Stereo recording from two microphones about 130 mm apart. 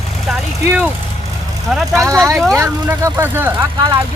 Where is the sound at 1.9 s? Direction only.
25° right (ahead or behind).